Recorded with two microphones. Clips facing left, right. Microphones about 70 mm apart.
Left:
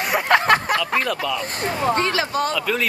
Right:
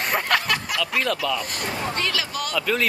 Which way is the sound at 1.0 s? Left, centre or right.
Centre.